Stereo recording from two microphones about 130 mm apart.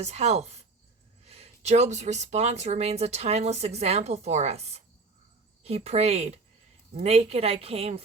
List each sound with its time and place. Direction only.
0.0 s a woman's voice: 55° right (ahead or behind)